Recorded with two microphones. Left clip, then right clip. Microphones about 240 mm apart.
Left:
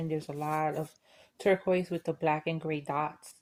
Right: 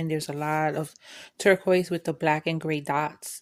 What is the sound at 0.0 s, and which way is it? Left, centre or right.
Speech, right.